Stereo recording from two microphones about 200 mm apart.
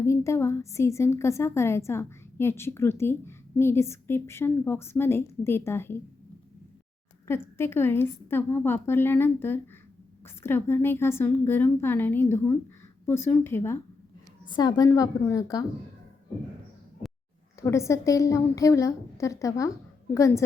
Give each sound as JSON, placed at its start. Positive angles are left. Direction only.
{"t": 0.0, "sound": "a woman's voice", "side_deg": 15}
{"t": 7.3, "sound": "a woman's voice", "side_deg": 10}
{"t": 17.6, "sound": "a woman's voice", "side_deg": 15}